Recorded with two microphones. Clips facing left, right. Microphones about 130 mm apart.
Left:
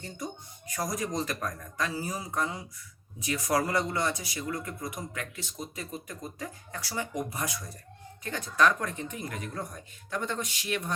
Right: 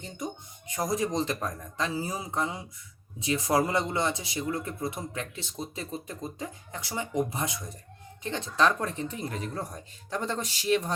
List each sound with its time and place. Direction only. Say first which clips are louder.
0.7 s speech: right 4 dB; 25° right (ahead or behind)